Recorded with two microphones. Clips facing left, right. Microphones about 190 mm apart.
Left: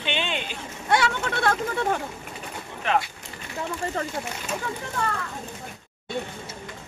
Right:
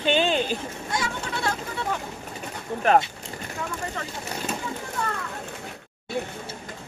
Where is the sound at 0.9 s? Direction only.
65° left (ahead or behind).